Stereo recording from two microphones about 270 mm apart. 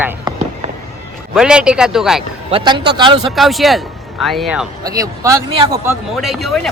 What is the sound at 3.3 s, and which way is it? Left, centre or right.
A man's voice, centre.